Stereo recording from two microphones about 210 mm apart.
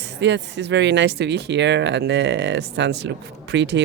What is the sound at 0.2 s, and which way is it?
Speech, 55° right (ahead or behind).